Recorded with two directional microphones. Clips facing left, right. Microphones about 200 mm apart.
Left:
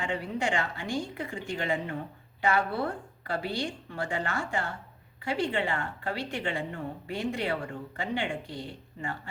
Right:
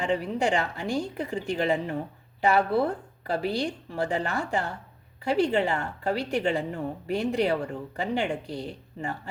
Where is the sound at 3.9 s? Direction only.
40° right (ahead or behind).